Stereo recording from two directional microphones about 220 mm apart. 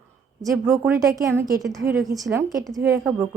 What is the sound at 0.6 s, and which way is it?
A woman's voice, 10° right (ahead or behind).